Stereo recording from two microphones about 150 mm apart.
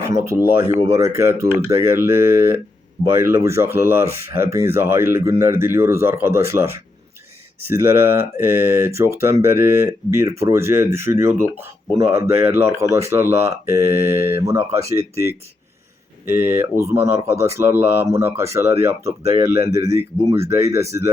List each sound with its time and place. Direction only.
0.0 s speech: 20° right (ahead or behind)
16.3 s speech: 15° right (ahead or behind)